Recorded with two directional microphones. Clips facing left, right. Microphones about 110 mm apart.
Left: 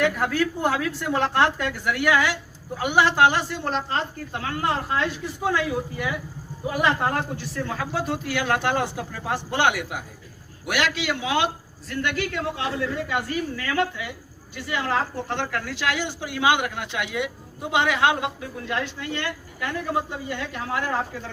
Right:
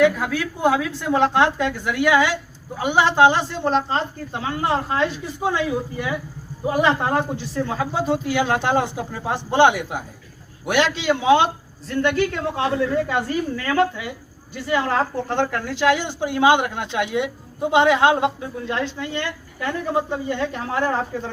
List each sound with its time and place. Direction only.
0.0 s a woman's voice: 10° right (ahead or behind); by 21.2 s 35° right (ahead or behind)